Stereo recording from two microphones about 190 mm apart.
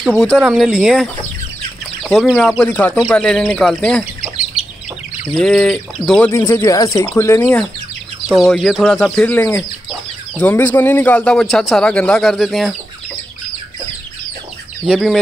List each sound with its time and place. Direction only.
0.0 s speech: centre (ahead or behind)
2.0 s speech: centre (ahead or behind)
4.6 s chicken: 5° right (ahead or behind)
5.2 s speech: centre (ahead or behind)
6.3 s speech: 15° left (ahead or behind)
8.3 s speech: centre (ahead or behind)
14.9 s speech: centre (ahead or behind)